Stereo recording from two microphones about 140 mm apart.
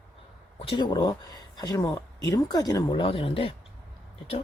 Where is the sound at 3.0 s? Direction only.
40° left (ahead or behind).